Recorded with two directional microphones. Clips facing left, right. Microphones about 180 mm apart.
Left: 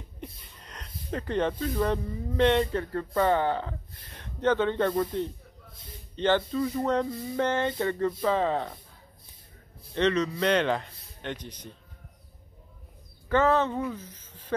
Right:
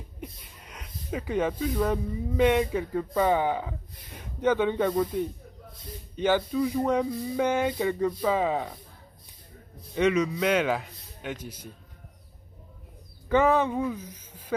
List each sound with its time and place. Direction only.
0.2 s speech: 10° right (ahead or behind)
9.9 s speech: 10° right (ahead or behind)
13.3 s speech: 15° right (ahead or behind)